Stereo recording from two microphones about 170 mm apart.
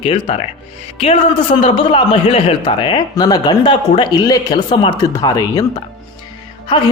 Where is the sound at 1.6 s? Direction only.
30° left (ahead or behind).